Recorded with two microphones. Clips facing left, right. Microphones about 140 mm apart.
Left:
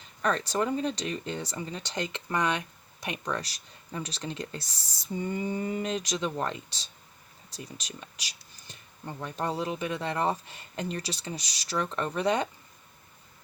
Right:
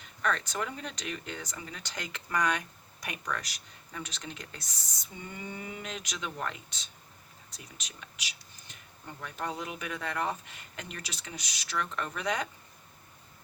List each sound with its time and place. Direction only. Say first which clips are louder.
0.0 s speech: left 3 dB; 35° left (ahead or behind)